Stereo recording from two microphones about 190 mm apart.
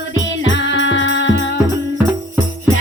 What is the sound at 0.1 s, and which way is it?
Music, 75° left (ahead or behind).